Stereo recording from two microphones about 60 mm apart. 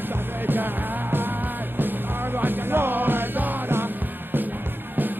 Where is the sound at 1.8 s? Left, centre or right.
Right.